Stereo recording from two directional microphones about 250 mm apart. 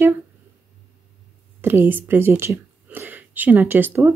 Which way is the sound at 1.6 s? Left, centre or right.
Centre.